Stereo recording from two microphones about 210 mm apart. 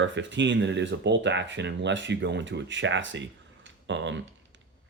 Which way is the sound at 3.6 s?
60° right (ahead or behind).